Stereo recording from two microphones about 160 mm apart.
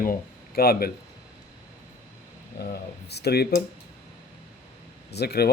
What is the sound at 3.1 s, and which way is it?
Speech, 90° left.